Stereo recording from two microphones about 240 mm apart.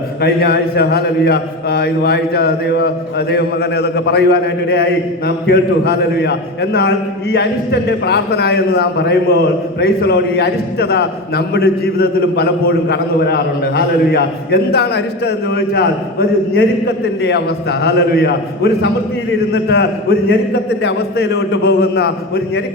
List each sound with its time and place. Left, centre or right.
0.2 s a man's voice: left